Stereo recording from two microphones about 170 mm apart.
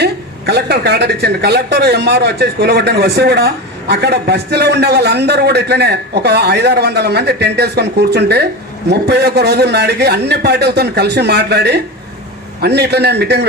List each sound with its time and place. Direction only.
0.0 s a woman's voice: 75° right (ahead or behind)